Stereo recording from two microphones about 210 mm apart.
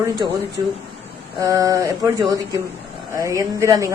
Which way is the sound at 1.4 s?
15° right (ahead or behind).